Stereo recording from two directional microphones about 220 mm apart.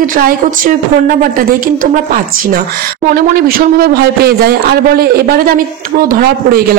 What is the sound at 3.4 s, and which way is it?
Speech, 45° right (ahead or behind).